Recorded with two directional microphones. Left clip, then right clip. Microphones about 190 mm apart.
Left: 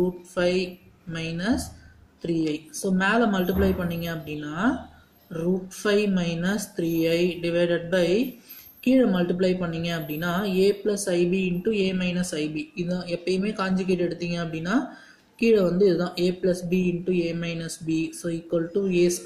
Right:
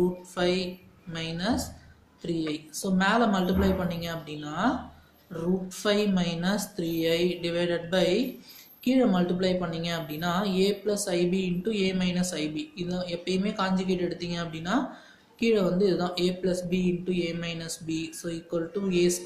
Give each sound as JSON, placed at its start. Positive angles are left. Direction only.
{"t": 1.1, "sound": "a woman's voice", "side_deg": 30}